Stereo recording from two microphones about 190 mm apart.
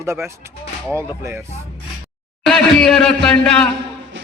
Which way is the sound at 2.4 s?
5° left (ahead or behind).